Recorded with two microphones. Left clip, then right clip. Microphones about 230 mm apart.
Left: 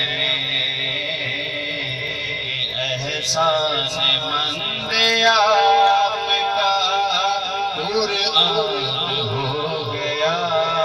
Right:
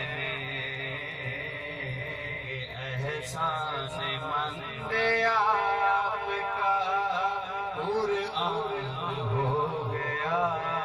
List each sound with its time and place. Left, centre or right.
0.2 s mantra: left
4.0 s speech: left
4.9 s synthetic singing: left
8.2 s a sound: left